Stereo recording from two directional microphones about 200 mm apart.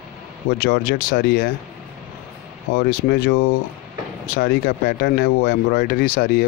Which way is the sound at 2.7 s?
45° left (ahead or behind).